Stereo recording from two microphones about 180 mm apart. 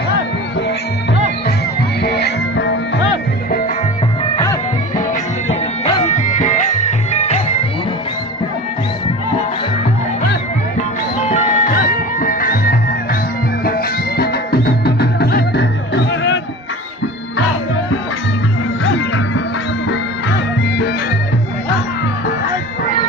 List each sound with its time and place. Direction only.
2.0 s music: 65° left (ahead or behind)
4.9 s music: 40° left (ahead or behind)
11.3 s music: 50° left (ahead or behind); by 16.4 s 80° left
20.7 s music: 65° left (ahead or behind)